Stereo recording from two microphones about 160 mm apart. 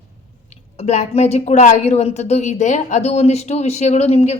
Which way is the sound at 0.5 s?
45° left (ahead or behind).